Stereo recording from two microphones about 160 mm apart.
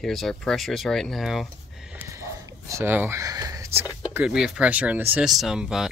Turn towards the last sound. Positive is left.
turn(degrees=-5)  # may be behind; listen again after turning